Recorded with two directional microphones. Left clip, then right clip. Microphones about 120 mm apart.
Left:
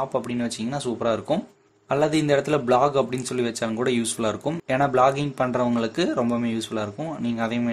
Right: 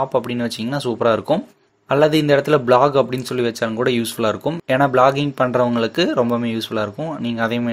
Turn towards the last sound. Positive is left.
turn(degrees=-30)  # may be behind; listen again after turning